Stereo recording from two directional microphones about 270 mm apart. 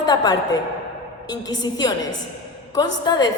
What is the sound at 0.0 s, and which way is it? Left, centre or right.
A woman's voice, centre.